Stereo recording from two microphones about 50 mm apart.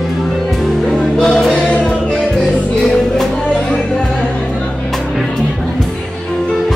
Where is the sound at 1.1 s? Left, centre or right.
Centre.